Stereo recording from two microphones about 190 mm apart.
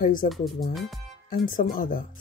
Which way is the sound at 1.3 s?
45° left (ahead or behind).